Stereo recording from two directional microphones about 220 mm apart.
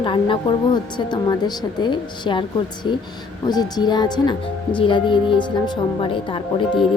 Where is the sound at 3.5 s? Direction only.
20° left (ahead or behind).